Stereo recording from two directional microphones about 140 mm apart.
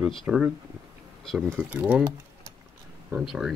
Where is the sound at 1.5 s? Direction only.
10° right (ahead or behind).